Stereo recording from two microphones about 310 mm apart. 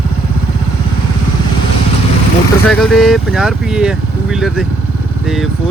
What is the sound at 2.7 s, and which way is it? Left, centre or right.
Speech, centre.